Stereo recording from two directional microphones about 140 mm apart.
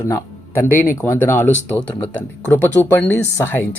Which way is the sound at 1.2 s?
10° left (ahead or behind).